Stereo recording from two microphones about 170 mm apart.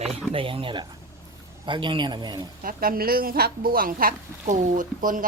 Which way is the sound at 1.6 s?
30° right (ahead or behind).